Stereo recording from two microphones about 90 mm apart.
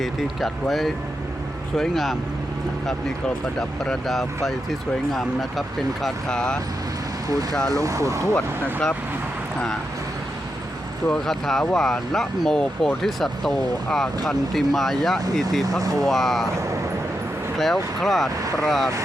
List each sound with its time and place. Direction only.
0.0 s speech: centre (ahead or behind)
3.8 s speech: centre (ahead or behind)
7.7 s speech: 40° right (ahead or behind)
8.6 s speech: 10° left (ahead or behind)
11.1 s speech: 5° left (ahead or behind)
15.8 s speech: 40° right (ahead or behind)
16.0 s speech: centre (ahead or behind)
17.6 s speech: centre (ahead or behind)